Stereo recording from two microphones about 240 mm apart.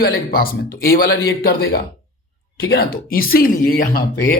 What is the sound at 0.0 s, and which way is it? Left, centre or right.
Speech, left.